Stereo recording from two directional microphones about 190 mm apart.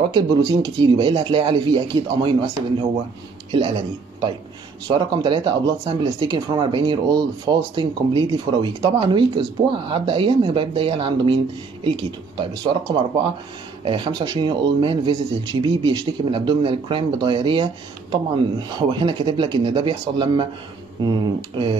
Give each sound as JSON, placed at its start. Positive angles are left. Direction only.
{"t": 0.0, "sound": "speech", "side_deg": -25}
{"t": 3.5, "sound": "speech", "side_deg": -25}